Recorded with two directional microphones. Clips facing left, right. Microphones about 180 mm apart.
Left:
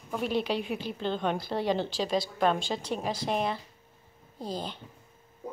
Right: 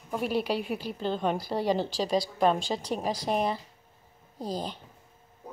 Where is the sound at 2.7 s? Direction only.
20° right (ahead or behind).